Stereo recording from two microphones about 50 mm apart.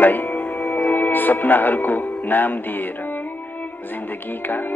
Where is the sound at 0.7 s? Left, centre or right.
Left.